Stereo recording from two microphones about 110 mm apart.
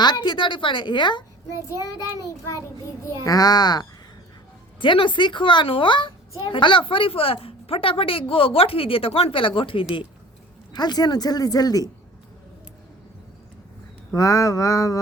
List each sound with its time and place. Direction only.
0.0 s speech: 40° left (ahead or behind)
2.1 s a child's voice: 30° left (ahead or behind)
4.8 s a woman's voice: 50° left (ahead or behind)
10.7 s a child's voice: 40° left (ahead or behind)
14.1 s a sound: 30° left (ahead or behind)